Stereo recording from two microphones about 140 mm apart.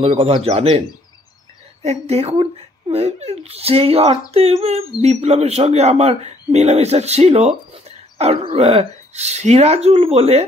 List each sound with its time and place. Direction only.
0.0 s speech: 45° right (ahead or behind)